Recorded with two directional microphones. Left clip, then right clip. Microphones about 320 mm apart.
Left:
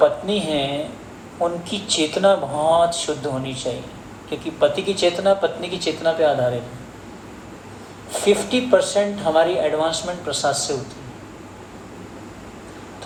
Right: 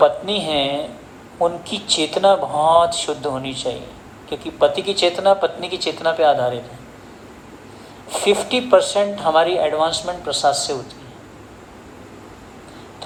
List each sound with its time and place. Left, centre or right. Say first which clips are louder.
0.0 s speech: right 2 dB; centre
8.1 s speech: right 1 dB; centre